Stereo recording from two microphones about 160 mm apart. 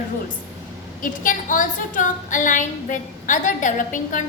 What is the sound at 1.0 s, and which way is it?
A woman's voice, 55° left (ahead or behind).